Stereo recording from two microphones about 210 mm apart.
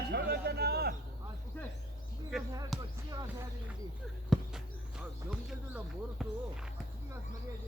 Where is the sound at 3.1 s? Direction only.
15° right (ahead or behind).